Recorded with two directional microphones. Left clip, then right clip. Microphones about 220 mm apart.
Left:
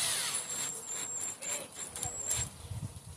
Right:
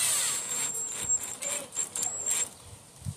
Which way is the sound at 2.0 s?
25° right (ahead or behind).